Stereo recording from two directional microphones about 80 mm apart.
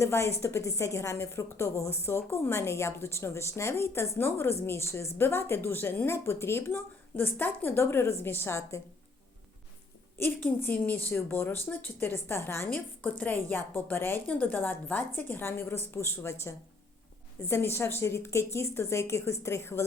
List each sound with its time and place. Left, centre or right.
0.0 s a woman's voice: left
10.2 s a woman's voice: left